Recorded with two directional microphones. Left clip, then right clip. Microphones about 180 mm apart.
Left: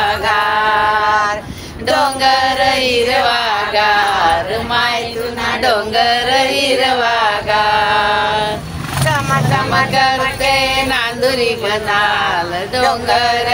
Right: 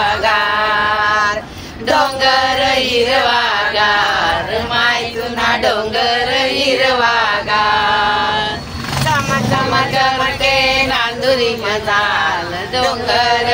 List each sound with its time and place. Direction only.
1.9 s music: 30° left (ahead or behind)
5.6 s chant: 30° left (ahead or behind)
9.9 s music: 30° left (ahead or behind)
12.7 s a sound: 30° left (ahead or behind)